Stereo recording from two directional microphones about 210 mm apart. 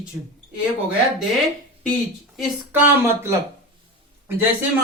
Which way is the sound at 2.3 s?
10° right (ahead or behind).